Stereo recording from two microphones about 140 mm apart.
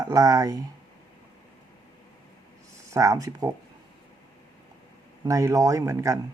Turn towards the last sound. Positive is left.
turn(degrees=-20)  # may be behind; listen again after turning